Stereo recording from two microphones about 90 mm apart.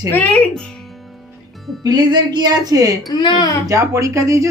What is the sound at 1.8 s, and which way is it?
Speech, 50° right (ahead or behind).